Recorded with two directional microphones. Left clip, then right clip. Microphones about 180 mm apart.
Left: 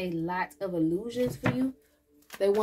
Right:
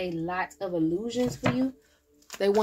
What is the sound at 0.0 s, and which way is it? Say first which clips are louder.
A woman's voice: right 1 dB; 35° right (ahead or behind).